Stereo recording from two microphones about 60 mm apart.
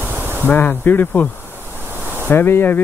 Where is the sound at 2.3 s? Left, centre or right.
Left.